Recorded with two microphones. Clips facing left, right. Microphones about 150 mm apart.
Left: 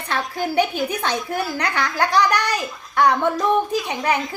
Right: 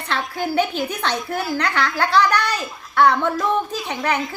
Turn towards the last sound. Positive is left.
turn(degrees=15)  # may be behind; listen again after turning